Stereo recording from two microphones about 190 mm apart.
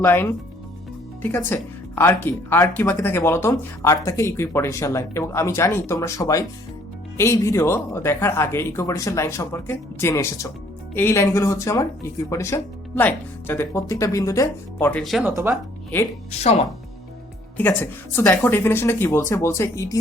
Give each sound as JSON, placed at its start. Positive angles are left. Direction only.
{"t": 0.0, "sound": "speech", "side_deg": 10}
{"t": 15.2, "sound": "speech", "side_deg": -15}
{"t": 16.3, "sound": "speech", "side_deg": 35}
{"t": 17.6, "sound": "speech", "side_deg": 10}